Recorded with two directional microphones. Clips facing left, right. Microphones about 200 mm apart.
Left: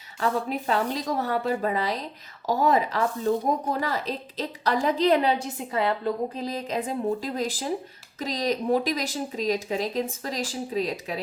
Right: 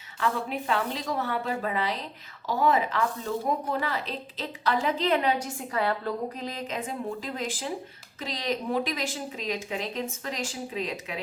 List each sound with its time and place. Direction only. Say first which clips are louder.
0.2 s speech: left 3 dB; 40° left (ahead or behind)
5.5 s a woman's voice: left 2 dB; 20° left (ahead or behind)
6.4 s speech: left 4 dB; 35° left (ahead or behind)